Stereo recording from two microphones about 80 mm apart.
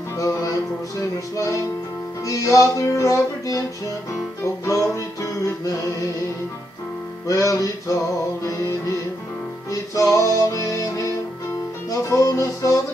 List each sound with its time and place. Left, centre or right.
0.2 s music: left
4.6 s music: left
7.2 s music: left
10.1 s music: left